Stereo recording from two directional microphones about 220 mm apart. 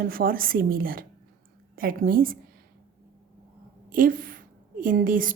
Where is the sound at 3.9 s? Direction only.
40° right (ahead or behind).